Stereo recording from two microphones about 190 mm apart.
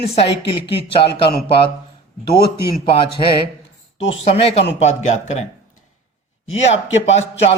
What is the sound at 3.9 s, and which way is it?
Speech, 30° left (ahead or behind).